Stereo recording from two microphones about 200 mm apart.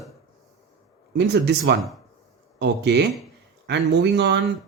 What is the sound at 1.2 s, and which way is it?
Speech, 60° right (ahead or behind).